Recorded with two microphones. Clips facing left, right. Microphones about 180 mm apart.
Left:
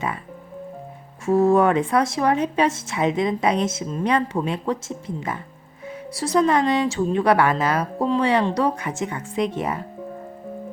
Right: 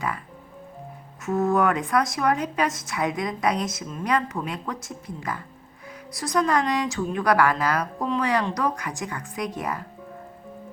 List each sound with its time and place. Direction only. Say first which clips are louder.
1.2 s speech: left 5 dB; 30° left (ahead or behind)